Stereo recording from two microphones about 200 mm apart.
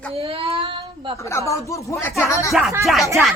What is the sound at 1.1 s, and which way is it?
Speech, 15° left (ahead or behind).